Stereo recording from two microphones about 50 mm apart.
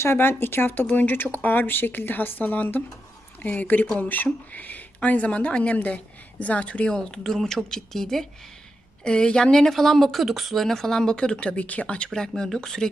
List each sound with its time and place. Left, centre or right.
0.0 s a woman's voice: left; by 12.9 s centre